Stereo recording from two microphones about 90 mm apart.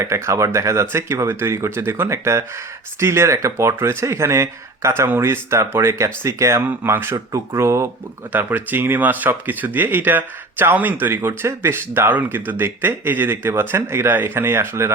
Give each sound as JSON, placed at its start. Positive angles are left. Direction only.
{"t": 0.0, "sound": "speech", "side_deg": -35}
{"t": 8.3, "sound": "speech", "side_deg": -20}